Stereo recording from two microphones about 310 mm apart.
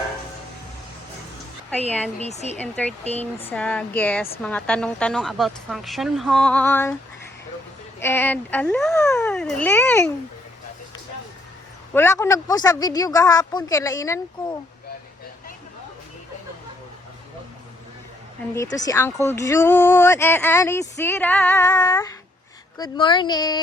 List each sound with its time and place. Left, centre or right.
2.1 s speech: left
2.6 s speech: centre
3.0 s speech: left
3.5 s speech: centre
7.9 s speech: centre
11.9 s speech: centre
18.5 s speech: centre